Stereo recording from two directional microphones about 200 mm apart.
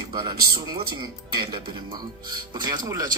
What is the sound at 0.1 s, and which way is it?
Speech, 25° right (ahead or behind).